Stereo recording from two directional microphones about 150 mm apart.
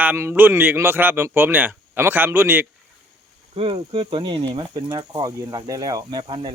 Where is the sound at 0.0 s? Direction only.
15° right (ahead or behind).